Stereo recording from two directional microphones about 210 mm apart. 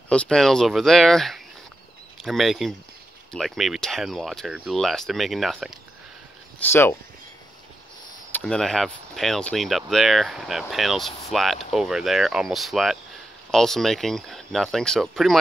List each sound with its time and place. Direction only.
0.1 s speech: 5° left (ahead or behind)
6.6 s speech: 10° left (ahead or behind)
8.3 s speech: 5° left (ahead or behind)